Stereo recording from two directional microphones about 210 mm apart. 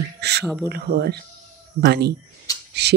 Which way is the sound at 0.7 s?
50° right (ahead or behind).